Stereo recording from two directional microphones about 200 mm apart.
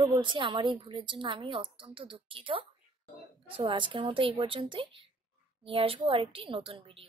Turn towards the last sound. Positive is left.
turn(degrees=-25)  # may be behind; listen again after turning